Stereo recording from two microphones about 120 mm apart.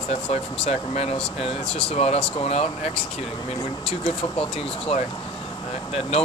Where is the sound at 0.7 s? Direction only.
60° left (ahead or behind).